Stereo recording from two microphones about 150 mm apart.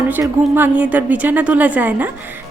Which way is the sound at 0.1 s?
10° right (ahead or behind).